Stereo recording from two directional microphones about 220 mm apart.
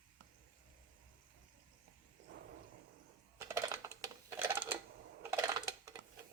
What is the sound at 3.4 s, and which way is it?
Typing, 15° right (ahead or behind).